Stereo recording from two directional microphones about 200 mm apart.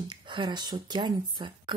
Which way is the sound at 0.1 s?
25° right (ahead or behind).